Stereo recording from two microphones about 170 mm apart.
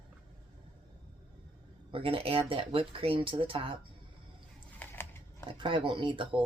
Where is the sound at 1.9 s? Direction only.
35° right (ahead or behind).